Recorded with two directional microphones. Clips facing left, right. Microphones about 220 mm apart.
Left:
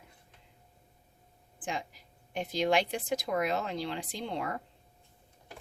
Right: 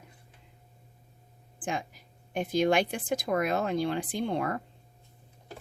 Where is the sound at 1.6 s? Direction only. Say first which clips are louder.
Right 3 dB; 50° right (ahead or behind).